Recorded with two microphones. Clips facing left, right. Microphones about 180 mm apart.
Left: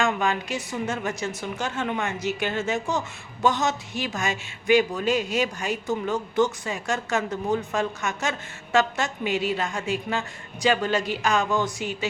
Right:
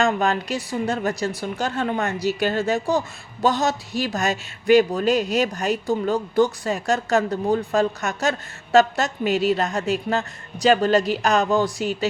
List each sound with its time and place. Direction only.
0.0 s speech: 35° right (ahead or behind)